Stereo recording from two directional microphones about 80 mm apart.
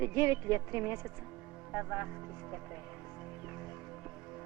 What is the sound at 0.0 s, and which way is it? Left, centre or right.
Speech, right.